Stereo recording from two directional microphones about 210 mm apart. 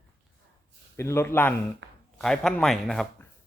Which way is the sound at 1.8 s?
60° right (ahead or behind).